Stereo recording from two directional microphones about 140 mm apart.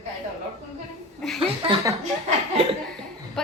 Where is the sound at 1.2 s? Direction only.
Centre (ahead or behind).